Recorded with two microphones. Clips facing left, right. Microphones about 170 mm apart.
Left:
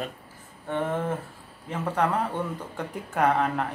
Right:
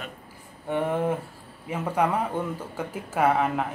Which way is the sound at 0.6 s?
10° right (ahead or behind).